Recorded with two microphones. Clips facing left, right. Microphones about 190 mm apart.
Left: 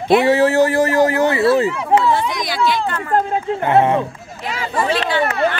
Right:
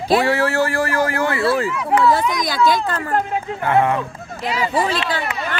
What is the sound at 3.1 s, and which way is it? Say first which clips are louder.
Speech: left 6 dB; 20° left (ahead or behind).